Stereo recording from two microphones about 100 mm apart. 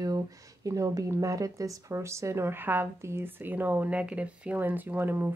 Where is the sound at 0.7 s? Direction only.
35° right (ahead or behind).